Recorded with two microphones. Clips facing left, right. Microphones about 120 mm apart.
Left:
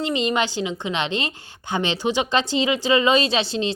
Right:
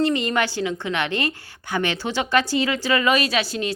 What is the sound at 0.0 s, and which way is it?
A woman's voice, 20° left (ahead or behind).